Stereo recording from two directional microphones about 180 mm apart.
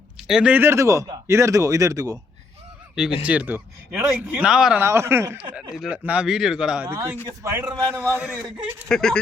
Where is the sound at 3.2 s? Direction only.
5° right (ahead or behind).